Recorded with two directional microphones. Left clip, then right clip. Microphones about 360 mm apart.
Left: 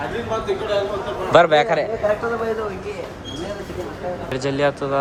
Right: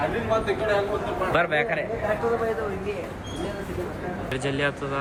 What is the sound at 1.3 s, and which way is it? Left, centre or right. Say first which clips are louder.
Speech: left 11 dB; centre.